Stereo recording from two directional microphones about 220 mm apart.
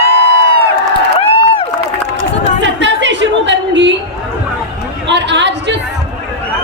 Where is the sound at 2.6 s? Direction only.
55° right (ahead or behind).